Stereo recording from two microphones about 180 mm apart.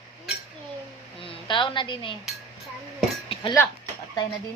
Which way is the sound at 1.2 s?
25° left (ahead or behind).